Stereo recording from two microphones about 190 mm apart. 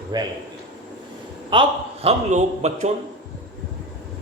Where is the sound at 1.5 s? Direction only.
25° right (ahead or behind).